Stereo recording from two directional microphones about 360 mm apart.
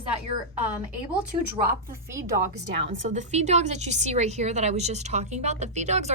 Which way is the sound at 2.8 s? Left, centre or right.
Centre.